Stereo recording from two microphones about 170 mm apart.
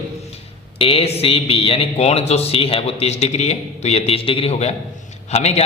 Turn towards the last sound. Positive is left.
turn(degrees=40)  # may be behind; listen again after turning